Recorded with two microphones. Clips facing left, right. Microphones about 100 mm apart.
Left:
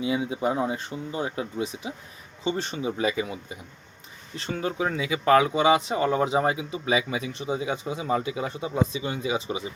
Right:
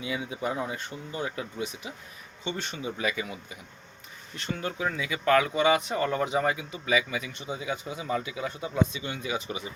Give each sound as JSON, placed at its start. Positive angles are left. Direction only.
{"t": 0.0, "sound": "speech", "side_deg": 25}